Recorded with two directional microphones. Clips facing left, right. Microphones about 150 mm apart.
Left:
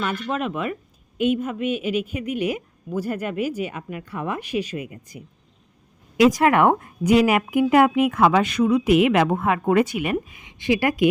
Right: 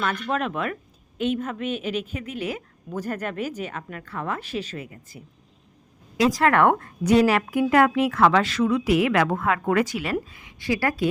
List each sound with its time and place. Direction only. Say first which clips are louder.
0.0 s a woman's voice: even; 5° left (ahead or behind)
6.3 s a woman's voice: left 2 dB; 15° left (ahead or behind)